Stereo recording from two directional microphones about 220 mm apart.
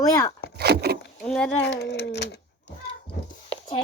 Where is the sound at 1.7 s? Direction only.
50° left (ahead or behind).